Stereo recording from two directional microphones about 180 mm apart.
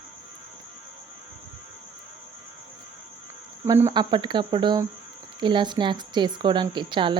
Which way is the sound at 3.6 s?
15° right (ahead or behind).